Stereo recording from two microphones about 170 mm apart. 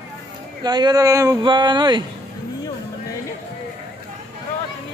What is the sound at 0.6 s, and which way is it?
Speech, 25° right (ahead or behind).